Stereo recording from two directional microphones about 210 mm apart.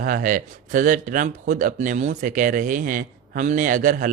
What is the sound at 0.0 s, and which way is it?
Speech, 40° right (ahead or behind).